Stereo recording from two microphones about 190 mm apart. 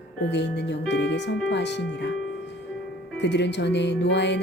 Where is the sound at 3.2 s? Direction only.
65° left (ahead or behind).